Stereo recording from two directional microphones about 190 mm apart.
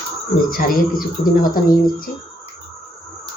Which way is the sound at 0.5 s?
45° left (ahead or behind).